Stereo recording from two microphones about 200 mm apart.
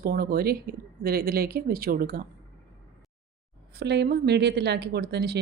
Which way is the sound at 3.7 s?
55° right (ahead or behind).